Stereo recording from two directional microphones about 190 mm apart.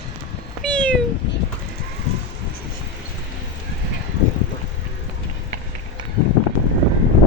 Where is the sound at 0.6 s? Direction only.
5° left (ahead or behind).